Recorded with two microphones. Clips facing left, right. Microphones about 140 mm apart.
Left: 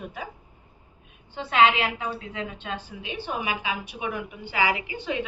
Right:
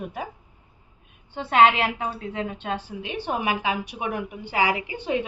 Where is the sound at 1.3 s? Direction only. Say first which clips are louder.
Right 2 dB; 55° right (ahead or behind).